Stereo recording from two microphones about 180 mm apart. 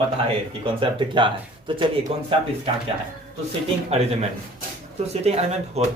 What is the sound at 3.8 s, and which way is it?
Speech, 35° right (ahead or behind).